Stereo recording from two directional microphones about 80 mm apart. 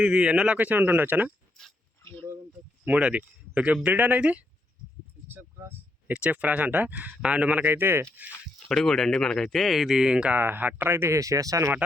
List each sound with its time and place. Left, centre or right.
0.0 s speech: centre
1.6 s speech: centre
2.0 s a sound: left
2.8 s speech: centre
8.5 s speech: centre
10.3 s speech: right